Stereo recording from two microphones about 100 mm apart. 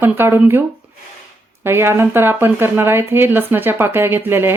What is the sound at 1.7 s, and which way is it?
Speech, 25° right (ahead or behind).